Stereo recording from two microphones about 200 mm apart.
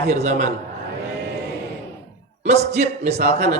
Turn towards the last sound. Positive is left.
turn(degrees=-35)  # may be behind; listen again after turning